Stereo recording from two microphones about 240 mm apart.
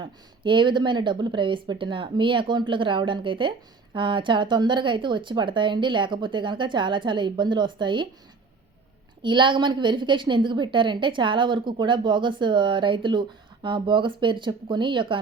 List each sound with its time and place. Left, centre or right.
0.0 s speech: centre
9.2 s speech: centre